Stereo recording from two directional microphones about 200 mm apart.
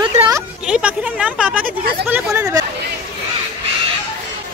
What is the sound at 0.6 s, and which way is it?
A woman's voice, 5° right (ahead or behind).